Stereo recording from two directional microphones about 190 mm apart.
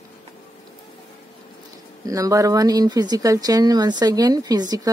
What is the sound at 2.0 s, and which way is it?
Speech, 15° right (ahead or behind).